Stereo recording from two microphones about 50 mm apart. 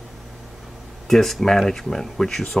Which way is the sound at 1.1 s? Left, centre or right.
Centre.